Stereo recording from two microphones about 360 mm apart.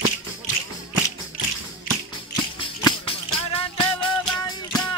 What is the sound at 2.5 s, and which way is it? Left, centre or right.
Music, centre.